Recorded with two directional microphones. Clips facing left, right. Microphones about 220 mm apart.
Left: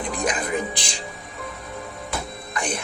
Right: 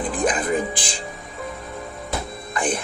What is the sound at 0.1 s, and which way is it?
Music, 50° right (ahead or behind).